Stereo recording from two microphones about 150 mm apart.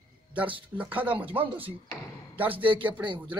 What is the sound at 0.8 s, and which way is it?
Speech, 10° right (ahead or behind).